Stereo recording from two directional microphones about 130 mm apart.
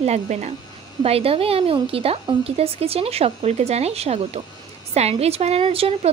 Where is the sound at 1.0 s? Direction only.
50° right (ahead or behind).